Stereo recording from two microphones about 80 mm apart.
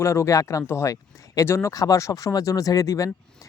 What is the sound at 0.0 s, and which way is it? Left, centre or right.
Speech, left.